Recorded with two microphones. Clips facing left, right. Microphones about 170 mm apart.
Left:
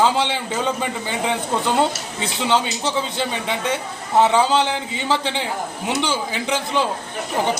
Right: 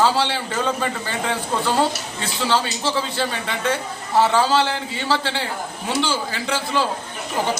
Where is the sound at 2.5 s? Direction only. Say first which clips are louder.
Left 1 dB; 20° left (ahead or behind).